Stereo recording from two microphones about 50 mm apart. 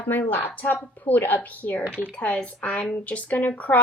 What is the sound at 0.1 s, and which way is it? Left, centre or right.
Speech, left.